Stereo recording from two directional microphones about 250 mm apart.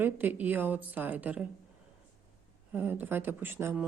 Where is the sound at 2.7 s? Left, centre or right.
Centre.